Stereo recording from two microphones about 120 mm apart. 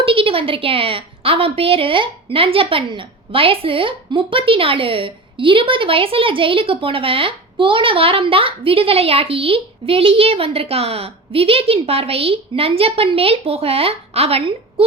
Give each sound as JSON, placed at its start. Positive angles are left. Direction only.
{"t": 0.0, "sound": "a woman's voice", "side_deg": -50}